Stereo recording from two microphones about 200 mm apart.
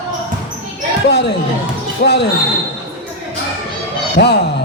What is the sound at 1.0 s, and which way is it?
A man's voice, 60° left (ahead or behind).